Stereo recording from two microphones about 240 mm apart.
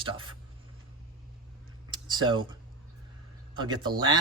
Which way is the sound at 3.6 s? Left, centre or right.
Centre.